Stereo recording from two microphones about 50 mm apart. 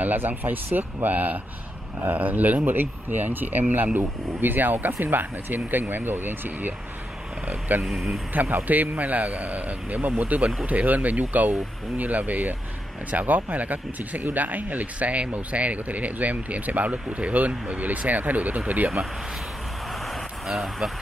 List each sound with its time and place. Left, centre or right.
0.0 s speech: right
7.8 s speech: centre
8.3 s speech: right
19.9 s vehicle: centre